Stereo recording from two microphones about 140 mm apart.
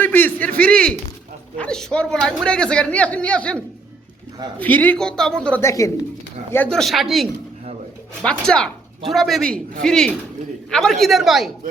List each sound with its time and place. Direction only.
0.0 s a sound: 15° left (ahead or behind)
1.5 s a man's voice: 5° left (ahead or behind)
4.6 s a man's voice: 10° left (ahead or behind)
5.6 s speech: 20° left (ahead or behind)
6.5 s a man's voice: 10° left (ahead or behind)